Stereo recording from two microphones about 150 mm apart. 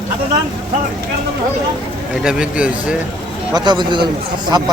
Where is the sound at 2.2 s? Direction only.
5° right (ahead or behind).